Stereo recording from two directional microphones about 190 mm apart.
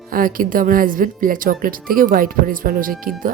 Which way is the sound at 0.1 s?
50° right (ahead or behind).